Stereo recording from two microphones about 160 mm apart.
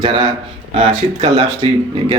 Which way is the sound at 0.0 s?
30° right (ahead or behind).